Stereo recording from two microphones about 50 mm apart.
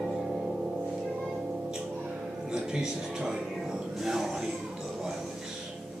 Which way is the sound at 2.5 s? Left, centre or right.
Centre.